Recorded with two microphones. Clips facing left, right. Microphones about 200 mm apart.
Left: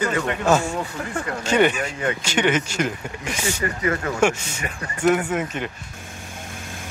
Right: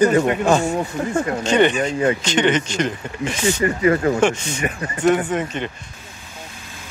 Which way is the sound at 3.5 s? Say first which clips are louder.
Right 8 dB; 25° right (ahead or behind).